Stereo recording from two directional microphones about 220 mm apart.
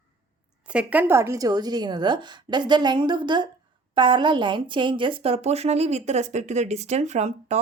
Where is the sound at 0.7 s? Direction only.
5° right (ahead or behind).